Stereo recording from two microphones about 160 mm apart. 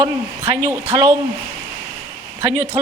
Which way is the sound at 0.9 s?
30° right (ahead or behind).